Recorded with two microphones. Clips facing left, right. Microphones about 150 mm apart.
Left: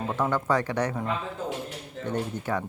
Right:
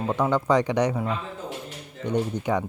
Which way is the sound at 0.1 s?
15° right (ahead or behind).